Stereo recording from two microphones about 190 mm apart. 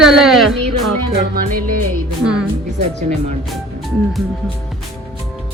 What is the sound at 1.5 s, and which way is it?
Music, 50° right (ahead or behind).